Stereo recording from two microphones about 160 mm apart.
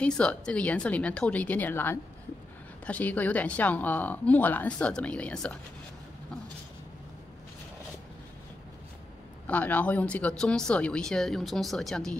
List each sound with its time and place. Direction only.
0.0 s speech: 10° left (ahead or behind)
9.5 s speech: 10° left (ahead or behind)